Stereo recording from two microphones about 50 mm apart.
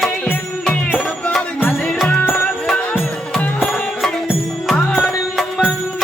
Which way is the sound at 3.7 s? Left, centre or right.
Centre.